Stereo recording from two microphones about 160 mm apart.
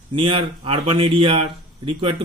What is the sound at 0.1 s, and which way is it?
A man's voice, 35° right (ahead or behind).